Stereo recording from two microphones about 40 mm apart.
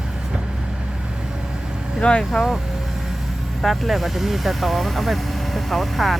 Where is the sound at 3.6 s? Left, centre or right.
Centre.